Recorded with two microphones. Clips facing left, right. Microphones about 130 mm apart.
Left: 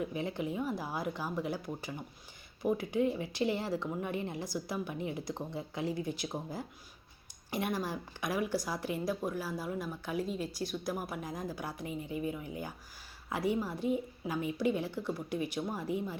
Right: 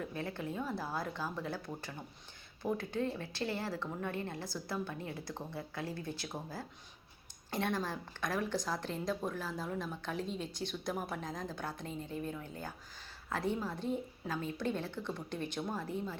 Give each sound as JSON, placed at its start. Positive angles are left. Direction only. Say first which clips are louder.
{"t": 0.0, "sound": "speech", "louder": "left 4 dB", "side_deg": 15}